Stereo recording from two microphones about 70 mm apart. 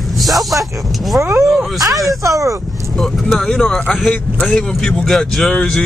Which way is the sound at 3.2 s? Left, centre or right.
Centre.